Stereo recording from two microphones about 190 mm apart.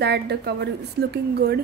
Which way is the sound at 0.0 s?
60° right (ahead or behind).